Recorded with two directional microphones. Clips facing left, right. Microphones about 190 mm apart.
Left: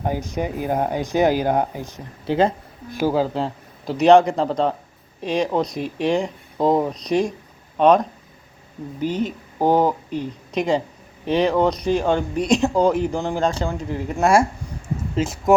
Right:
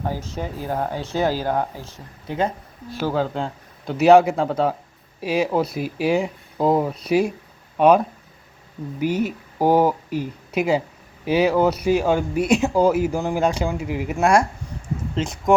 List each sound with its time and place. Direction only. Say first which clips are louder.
0.0 s speech: left 4 dB; 15° left (ahead or behind)
2.2 s speech: left 5 dB; 30° left (ahead or behind)
2.9 s speech: left 3 dB; 10° left (ahead or behind); by 14.3 s 10° right (ahead or behind)
15.1 s speech: left 2 dB; 5° left (ahead or behind)